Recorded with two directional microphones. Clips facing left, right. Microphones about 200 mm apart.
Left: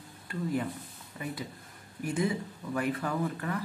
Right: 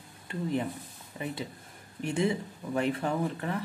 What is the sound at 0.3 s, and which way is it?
Speech, 25° right (ahead or behind).